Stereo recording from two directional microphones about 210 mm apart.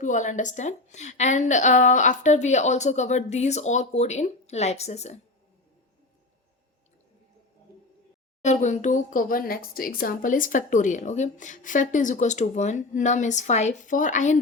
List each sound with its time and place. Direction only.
0.0 s speech: 35° left (ahead or behind)
8.4 s speech: 35° left (ahead or behind)